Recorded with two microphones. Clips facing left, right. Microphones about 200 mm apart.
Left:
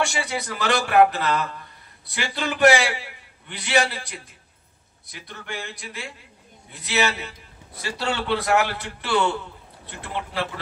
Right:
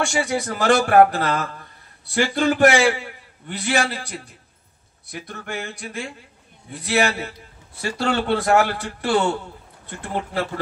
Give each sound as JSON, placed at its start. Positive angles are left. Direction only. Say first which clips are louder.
{"t": 0.0, "sound": "a man's voice", "louder": "right 4 dB", "side_deg": -45}
{"t": 5.1, "sound": "a man's voice", "louder": "right 4 dB", "side_deg": -45}